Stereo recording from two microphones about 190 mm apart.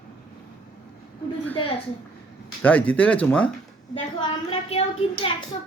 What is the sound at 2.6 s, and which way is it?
Speech, 10° left (ahead or behind).